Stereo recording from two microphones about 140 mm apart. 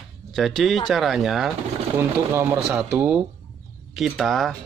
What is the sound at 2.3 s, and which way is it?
Speech, 15° right (ahead or behind).